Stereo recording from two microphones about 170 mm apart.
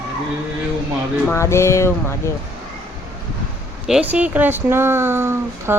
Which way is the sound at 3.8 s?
5° right (ahead or behind).